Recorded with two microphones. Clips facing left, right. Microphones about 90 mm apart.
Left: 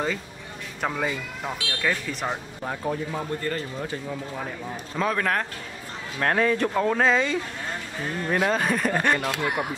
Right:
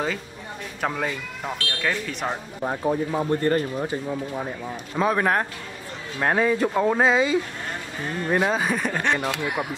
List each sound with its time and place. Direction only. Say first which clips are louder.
0.7 s speech: even; centre (ahead or behind)
2.6 s speech: right 6 dB; 15° right (ahead or behind); by 9.7 s centre (ahead or behind)